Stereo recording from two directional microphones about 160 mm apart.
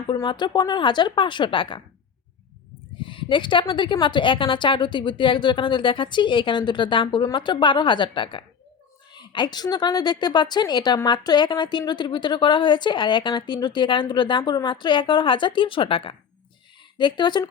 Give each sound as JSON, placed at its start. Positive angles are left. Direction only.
{"t": 0.1, "sound": "a woman's voice", "side_deg": 30}
{"t": 3.0, "sound": "a woman's voice", "side_deg": 30}